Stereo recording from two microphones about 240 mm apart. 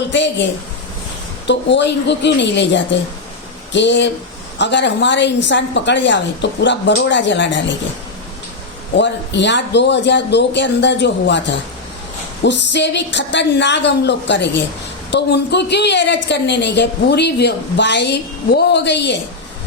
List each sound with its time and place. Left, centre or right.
0.1 s a woman's voice: left
1.5 s a woman's voice: left
9.0 s a woman's voice: left